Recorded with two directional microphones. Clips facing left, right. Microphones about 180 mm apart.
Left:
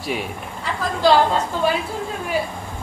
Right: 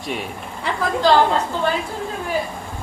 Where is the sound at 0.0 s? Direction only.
Centre (ahead or behind).